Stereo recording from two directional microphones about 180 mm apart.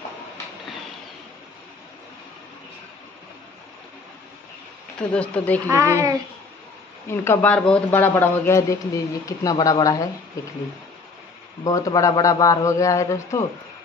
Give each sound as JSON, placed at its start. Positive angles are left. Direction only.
{"t": 4.9, "sound": "speech", "side_deg": 5}
{"t": 5.7, "sound": "speech", "side_deg": -15}
{"t": 7.1, "sound": "speech", "side_deg": 10}
{"t": 11.6, "sound": "speech", "side_deg": 20}